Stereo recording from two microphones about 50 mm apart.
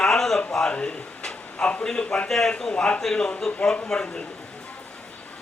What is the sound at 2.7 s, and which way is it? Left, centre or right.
A man's voice, left.